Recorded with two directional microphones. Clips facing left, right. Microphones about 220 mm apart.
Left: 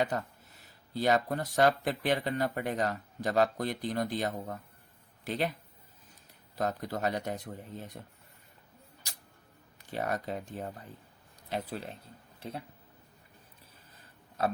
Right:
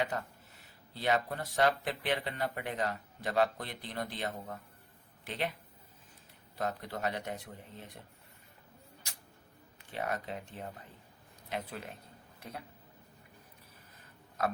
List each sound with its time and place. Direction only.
0.9 s speech: 40° left (ahead or behind)
6.6 s speech: 40° left (ahead or behind)
9.9 s speech: 40° left (ahead or behind)
14.4 s speech: 30° left (ahead or behind)